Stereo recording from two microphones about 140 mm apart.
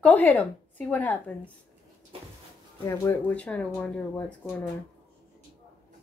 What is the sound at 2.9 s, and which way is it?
Speech, 20° left (ahead or behind).